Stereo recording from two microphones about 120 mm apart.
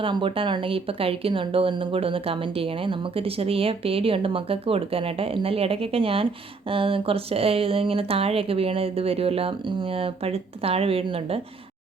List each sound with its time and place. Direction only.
0.0 s speech: 45° right (ahead or behind)